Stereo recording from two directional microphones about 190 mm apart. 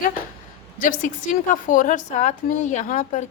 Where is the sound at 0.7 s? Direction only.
45° left (ahead or behind).